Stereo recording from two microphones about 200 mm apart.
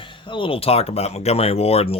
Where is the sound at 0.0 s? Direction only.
25° left (ahead or behind).